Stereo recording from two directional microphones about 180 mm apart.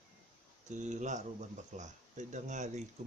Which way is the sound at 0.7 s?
40° right (ahead or behind).